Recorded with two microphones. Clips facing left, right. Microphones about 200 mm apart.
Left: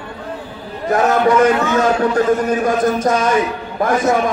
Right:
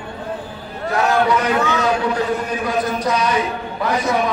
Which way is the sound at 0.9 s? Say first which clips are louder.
Left 4 dB; 45° left (ahead or behind).